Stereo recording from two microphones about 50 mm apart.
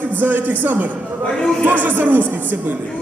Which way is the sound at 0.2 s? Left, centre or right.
Right.